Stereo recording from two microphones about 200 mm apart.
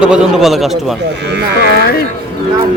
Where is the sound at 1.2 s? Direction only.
55° right (ahead or behind).